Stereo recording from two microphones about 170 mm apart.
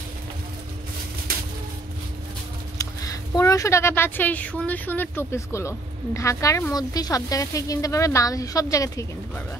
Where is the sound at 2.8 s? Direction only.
20° left (ahead or behind).